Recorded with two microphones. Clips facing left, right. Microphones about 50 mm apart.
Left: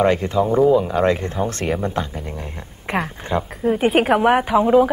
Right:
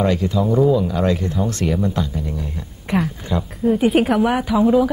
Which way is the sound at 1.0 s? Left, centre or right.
Left.